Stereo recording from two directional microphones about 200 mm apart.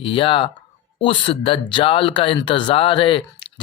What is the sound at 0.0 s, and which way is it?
Speech, 25° left (ahead or behind).